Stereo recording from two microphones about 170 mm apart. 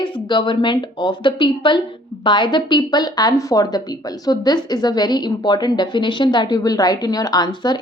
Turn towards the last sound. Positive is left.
turn(degrees=25)  # may be behind; listen again after turning